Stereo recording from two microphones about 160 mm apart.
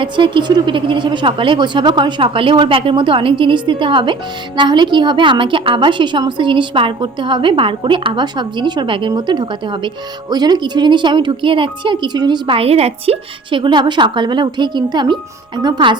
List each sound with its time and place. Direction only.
0.0 s speech: 30° right (ahead or behind)